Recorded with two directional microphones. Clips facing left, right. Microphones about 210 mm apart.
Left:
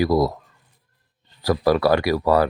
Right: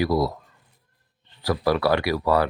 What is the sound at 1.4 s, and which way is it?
Speech, 40° left (ahead or behind).